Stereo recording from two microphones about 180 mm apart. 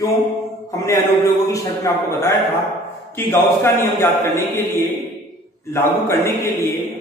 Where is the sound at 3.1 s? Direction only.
15° left (ahead or behind).